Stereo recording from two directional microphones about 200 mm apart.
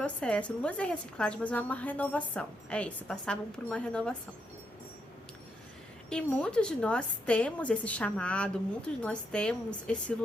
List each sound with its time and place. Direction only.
0.0 s a woman's voice: 5° left (ahead or behind)
6.1 s a woman's voice: 5° left (ahead or behind)